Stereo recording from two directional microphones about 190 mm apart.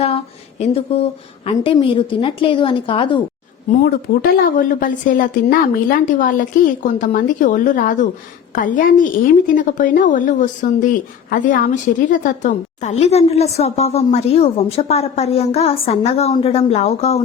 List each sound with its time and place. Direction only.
0.6 s a woman's voice: 30° left (ahead or behind)
3.8 s a woman's voice: 50° left (ahead or behind); by 17.2 s 35° left (ahead or behind)